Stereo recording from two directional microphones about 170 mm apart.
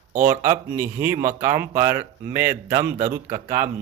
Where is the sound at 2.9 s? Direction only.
50° right (ahead or behind).